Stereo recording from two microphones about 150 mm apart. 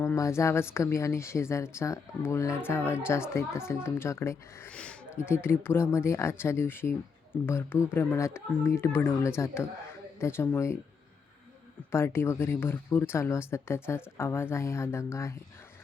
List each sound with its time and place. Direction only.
0.0 s a woman's voice: 20° left (ahead or behind)
11.9 s a woman's voice: 15° left (ahead or behind)